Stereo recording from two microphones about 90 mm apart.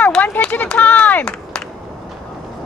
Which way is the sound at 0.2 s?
20° left (ahead or behind).